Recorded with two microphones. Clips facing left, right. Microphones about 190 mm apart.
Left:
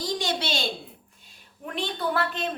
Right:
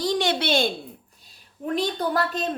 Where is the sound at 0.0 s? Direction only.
65° right (ahead or behind).